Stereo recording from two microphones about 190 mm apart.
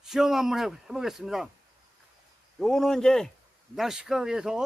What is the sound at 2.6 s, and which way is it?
Speech, centre (ahead or behind).